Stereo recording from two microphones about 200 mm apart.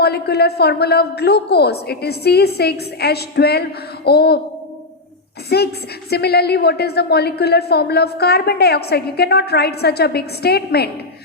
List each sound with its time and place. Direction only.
0.0 s a woman's voice: 55° left (ahead or behind)
5.5 s a woman's voice: 55° left (ahead or behind)